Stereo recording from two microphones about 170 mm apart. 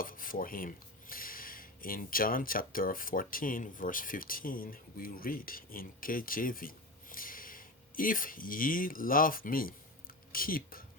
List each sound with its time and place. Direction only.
0.0 s speech: 55° left (ahead or behind)